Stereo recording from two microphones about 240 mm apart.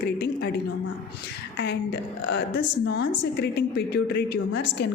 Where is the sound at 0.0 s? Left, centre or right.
Left.